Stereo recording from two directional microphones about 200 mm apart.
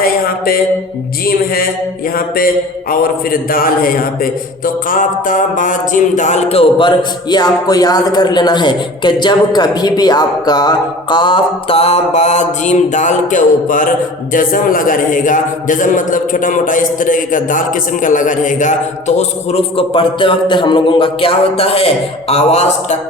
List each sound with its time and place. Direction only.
0.0 s mantra: 45° left (ahead or behind)
2.9 s a man's voice: 45° left (ahead or behind)